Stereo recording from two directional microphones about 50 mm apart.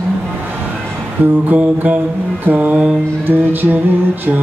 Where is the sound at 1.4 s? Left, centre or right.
Right.